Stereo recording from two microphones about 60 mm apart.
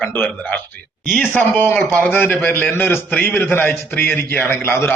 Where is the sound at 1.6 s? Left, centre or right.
Left.